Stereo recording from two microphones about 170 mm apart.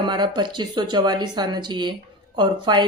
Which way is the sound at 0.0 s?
25° right (ahead or behind).